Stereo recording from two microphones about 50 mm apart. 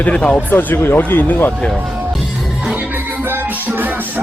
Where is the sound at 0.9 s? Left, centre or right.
Left.